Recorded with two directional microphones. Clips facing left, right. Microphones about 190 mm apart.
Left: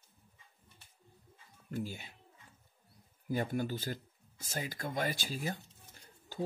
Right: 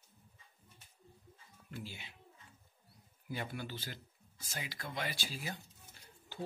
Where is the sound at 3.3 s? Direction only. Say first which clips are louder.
Left 8 dB; 45° left (ahead or behind).